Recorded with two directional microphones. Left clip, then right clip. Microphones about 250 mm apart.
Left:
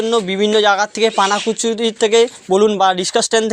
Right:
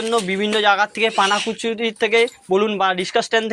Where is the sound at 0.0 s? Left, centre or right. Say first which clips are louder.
Left 4 dB; left.